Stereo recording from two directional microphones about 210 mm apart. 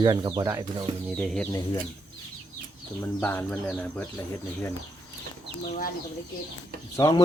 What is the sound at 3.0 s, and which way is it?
Speech, 10° left (ahead or behind).